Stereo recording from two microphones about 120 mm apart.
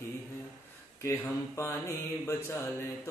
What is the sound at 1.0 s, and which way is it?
Mantra, 25° left (ahead or behind).